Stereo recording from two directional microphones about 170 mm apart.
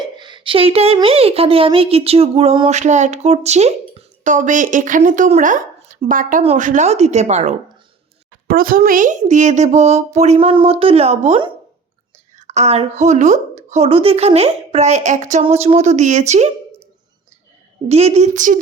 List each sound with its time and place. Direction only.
0.2 s a sound: 25° right (ahead or behind)
0.9 s speech: 35° right (ahead or behind)
8.4 s speech: 60° right (ahead or behind); by 11.5 s 35° right (ahead or behind)
12.4 s whispering: 40° right (ahead or behind)
13.0 s speech: 45° right (ahead or behind)
17.8 s speech: 40° right (ahead or behind)